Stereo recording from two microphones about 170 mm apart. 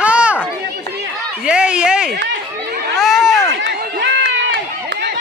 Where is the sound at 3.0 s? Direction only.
Centre (ahead or behind).